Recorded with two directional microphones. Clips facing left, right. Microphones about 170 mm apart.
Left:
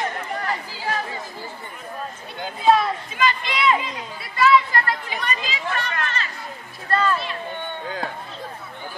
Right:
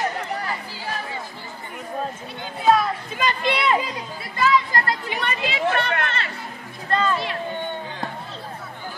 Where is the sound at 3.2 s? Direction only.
55° right (ahead or behind).